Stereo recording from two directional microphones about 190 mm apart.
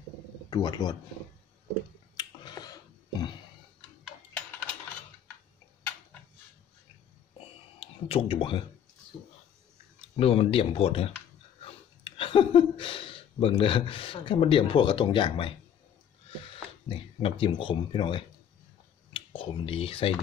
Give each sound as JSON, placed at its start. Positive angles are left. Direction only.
{"t": 0.5, "sound": "speech", "side_deg": 20}
{"t": 2.1, "sound": "finger snapping", "side_deg": 20}
{"t": 7.8, "sound": "speech", "side_deg": 30}
{"t": 10.1, "sound": "speech", "side_deg": 30}
{"t": 16.9, "sound": "speech", "side_deg": 25}